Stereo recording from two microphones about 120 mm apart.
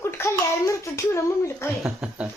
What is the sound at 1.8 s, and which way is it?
Speech, 10° right (ahead or behind).